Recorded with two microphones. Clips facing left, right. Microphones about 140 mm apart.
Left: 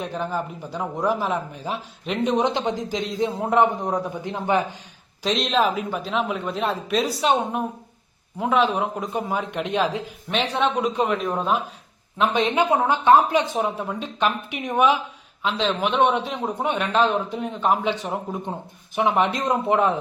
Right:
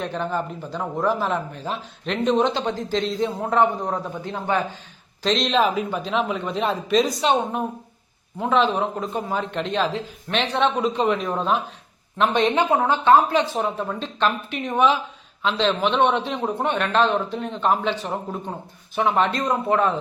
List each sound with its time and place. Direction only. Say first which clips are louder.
0.0 s speech: right 1 dB; 10° left (ahead or behind)